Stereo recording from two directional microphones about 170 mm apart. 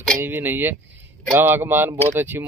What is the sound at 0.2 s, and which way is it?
Speech, 10° right (ahead or behind).